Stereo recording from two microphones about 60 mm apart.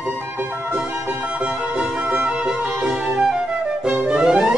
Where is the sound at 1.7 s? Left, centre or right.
Right.